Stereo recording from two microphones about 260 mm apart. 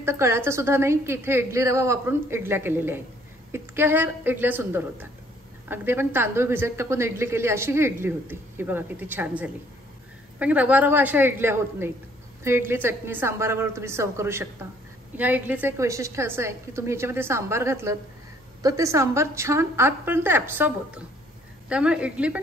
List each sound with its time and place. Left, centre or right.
0.0 s a woman's voice: centre